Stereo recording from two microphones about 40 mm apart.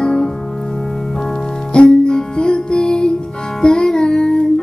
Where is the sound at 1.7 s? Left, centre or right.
Left.